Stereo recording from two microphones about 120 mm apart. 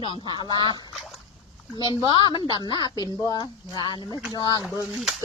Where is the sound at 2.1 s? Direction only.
40° left (ahead or behind).